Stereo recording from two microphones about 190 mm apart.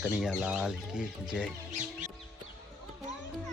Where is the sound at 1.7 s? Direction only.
40° right (ahead or behind).